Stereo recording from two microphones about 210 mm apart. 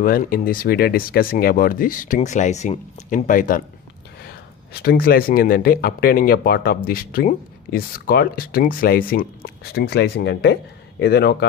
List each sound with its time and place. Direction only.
0.0 s speech: 40° left (ahead or behind)
4.8 s speech: 45° left (ahead or behind)